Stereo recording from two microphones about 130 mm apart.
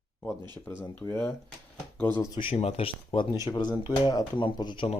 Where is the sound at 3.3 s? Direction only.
30° left (ahead or behind).